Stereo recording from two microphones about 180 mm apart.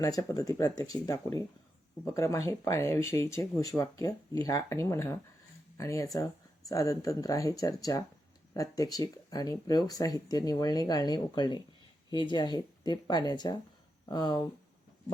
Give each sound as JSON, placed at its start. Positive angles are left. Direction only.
{"t": 0.0, "sound": "speech", "side_deg": 20}